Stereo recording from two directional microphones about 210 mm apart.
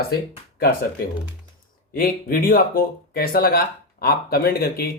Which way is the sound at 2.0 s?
45° left (ahead or behind).